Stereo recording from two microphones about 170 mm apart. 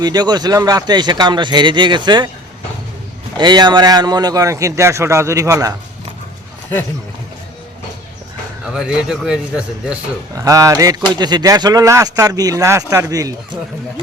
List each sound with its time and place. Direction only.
0.0 s speech: 25° right (ahead or behind)
3.3 s speech: 25° right (ahead or behind)
8.6 s a man's voice: 5° right (ahead or behind)
10.3 s speech: 20° right (ahead or behind)